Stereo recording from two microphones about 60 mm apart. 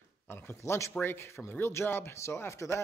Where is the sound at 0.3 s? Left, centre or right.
Left.